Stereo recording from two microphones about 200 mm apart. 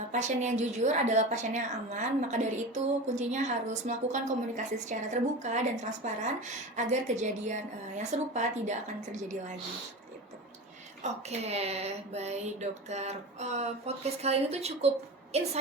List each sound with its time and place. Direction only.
0.1 s a woman's voice: 35° right (ahead or behind)
11.0 s a woman's voice: 35° right (ahead or behind)